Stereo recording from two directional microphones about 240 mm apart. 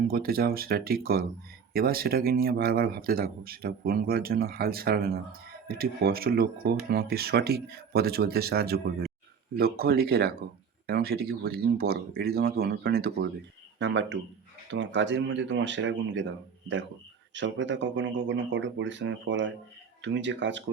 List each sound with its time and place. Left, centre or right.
0.1 s speech: right
17.3 s speech: right